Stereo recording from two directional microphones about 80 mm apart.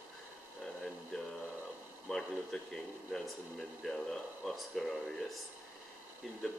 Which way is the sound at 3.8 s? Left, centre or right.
Centre.